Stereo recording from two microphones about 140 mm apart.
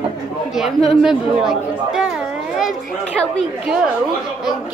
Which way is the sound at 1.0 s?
5° right (ahead or behind).